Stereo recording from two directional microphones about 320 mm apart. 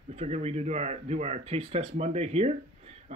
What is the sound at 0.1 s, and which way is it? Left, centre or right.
Speech, centre.